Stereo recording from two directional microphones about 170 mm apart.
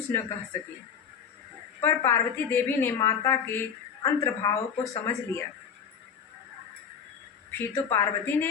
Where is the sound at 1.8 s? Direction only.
15° left (ahead or behind).